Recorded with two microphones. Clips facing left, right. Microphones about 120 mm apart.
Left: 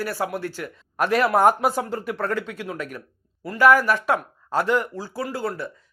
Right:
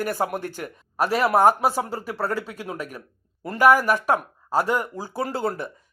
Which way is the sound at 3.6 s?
15° right (ahead or behind).